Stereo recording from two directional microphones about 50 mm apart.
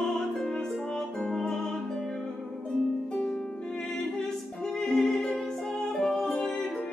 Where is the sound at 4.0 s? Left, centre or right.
Centre.